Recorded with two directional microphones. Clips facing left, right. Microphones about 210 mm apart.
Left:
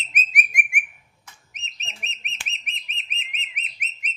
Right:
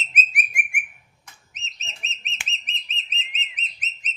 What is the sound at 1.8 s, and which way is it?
Bird, 60° left (ahead or behind).